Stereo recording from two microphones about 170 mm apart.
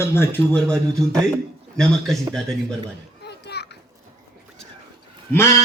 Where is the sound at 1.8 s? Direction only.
5° left (ahead or behind).